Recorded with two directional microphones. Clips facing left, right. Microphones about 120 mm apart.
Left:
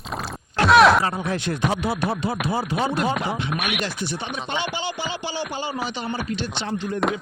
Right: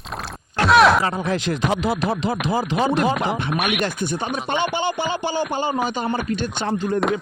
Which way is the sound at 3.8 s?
50° right (ahead or behind).